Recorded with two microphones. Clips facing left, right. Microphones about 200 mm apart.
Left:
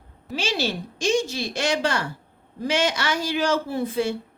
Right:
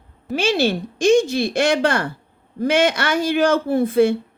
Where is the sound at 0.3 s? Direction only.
55° right (ahead or behind).